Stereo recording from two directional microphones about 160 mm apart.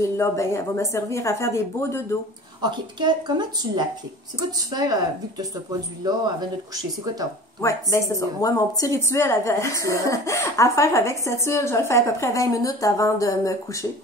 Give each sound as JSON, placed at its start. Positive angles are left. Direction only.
{"t": 0.0, "sound": "a woman's voice", "side_deg": 20}
{"t": 2.6, "sound": "speech", "side_deg": -30}
{"t": 5.7, "sound": "speech", "side_deg": -25}
{"t": 7.6, "sound": "speech", "side_deg": 20}